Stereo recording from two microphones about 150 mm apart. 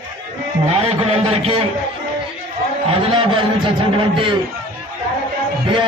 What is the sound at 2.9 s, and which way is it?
Speech, 35° right (ahead or behind).